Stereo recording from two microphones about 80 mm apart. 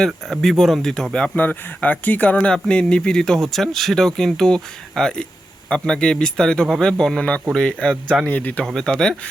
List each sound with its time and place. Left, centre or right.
0.0 s speech: centre
8.6 s speech: centre